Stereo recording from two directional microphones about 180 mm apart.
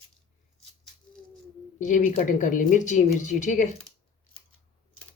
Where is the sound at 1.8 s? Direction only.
45° left (ahead or behind).